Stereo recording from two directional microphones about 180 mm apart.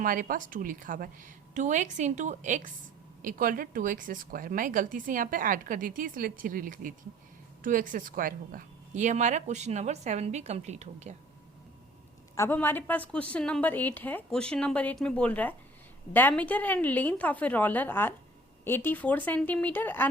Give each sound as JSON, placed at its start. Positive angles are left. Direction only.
{"t": 0.0, "sound": "a woman's voice", "side_deg": -50}
{"t": 12.4, "sound": "a woman's voice", "side_deg": 10}